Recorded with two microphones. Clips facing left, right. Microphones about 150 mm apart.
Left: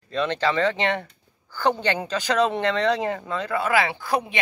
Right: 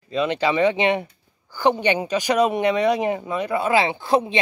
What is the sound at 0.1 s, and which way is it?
Speech, 10° right (ahead or behind).